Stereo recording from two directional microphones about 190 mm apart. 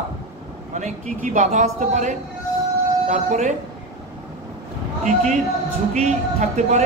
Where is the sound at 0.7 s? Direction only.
40° right (ahead or behind).